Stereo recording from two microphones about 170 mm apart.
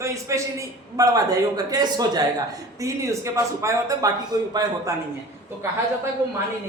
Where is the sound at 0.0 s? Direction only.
15° right (ahead or behind).